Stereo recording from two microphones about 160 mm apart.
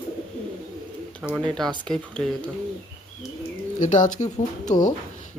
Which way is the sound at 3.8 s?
50° left (ahead or behind).